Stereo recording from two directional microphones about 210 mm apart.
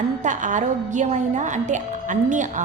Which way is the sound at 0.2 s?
35° right (ahead or behind).